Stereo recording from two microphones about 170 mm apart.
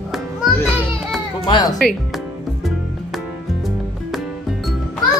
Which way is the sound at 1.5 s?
25° left (ahead or behind).